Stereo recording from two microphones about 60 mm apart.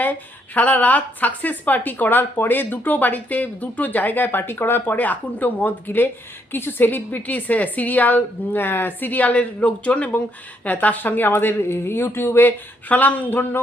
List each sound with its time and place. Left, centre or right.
0.0 s speech: left